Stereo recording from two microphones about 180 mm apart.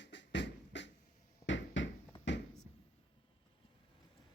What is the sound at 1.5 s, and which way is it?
Bouncing, 90° left.